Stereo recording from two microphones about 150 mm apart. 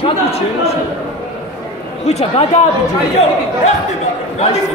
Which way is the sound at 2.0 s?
45° left (ahead or behind).